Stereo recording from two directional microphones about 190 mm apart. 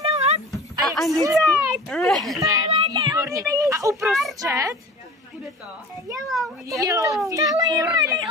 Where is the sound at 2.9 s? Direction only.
20° right (ahead or behind).